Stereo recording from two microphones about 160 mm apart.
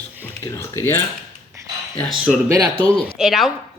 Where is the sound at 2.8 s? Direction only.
5° left (ahead or behind).